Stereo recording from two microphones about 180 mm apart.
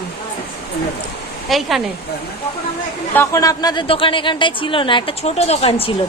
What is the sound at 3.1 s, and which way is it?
A woman's voice, 15° left (ahead or behind).